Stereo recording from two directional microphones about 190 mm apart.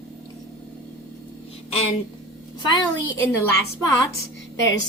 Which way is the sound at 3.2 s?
15° left (ahead or behind).